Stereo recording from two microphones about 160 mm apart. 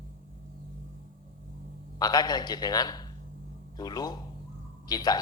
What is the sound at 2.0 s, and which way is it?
A woman's voice, 25° left (ahead or behind).